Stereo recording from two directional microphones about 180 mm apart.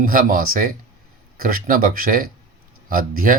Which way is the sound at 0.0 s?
50° right (ahead or behind).